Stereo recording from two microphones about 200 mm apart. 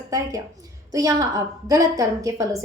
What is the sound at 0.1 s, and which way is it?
A woman's voice, 15° right (ahead or behind).